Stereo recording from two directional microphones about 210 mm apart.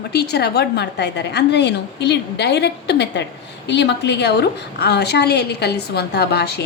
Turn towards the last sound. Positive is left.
turn(degrees=50)  # may be behind; listen again after turning